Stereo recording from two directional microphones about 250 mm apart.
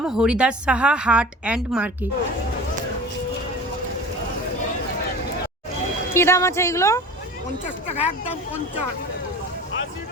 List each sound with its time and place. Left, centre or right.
0.0 s speech: centre
6.1 s a woman's voice: centre
7.9 s speech: left